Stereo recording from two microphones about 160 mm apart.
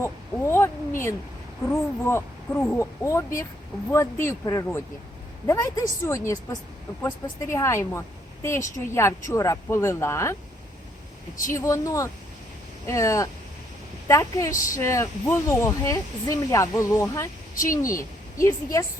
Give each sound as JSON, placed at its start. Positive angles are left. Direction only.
{"t": 0.0, "sound": "speech", "side_deg": 15}
{"t": 11.5, "sound": "a woman's voice", "side_deg": 20}